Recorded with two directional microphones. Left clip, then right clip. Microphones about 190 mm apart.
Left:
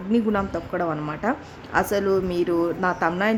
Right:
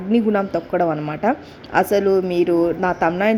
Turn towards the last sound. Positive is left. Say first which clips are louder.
# right 4 dB
turn(degrees=-10)  # may be behind; listen again after turning